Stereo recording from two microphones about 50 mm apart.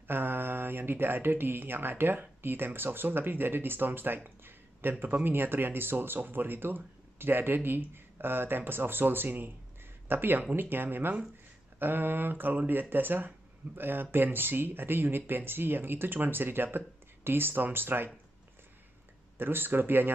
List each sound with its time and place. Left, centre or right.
0.1 s speech: right
11.8 s a sound: right
13.7 s speech: right
19.3 s speech: right